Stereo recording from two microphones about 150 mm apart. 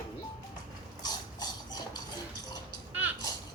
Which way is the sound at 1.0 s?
25° left (ahead or behind).